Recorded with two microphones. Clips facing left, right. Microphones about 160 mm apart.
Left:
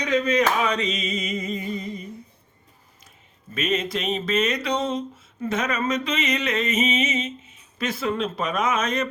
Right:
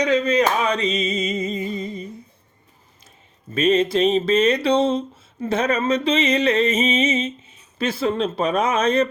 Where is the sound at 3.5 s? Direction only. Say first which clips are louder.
Right 8 dB; 30° right (ahead or behind).